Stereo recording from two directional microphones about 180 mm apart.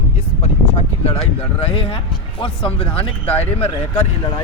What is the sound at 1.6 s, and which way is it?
A man's voice, 30° left (ahead or behind).